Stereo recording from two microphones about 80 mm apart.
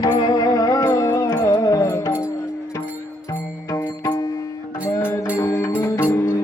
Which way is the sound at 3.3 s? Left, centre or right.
Left.